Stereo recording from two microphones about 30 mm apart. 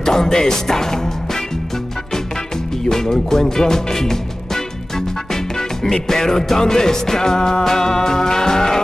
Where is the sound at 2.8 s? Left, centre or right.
Centre.